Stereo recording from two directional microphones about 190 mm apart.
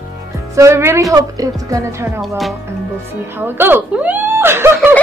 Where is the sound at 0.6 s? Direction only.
15° right (ahead or behind).